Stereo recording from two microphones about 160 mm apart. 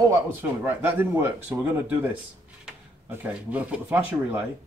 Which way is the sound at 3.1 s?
10° right (ahead or behind).